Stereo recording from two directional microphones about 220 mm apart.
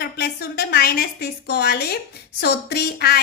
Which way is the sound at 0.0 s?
45° left (ahead or behind).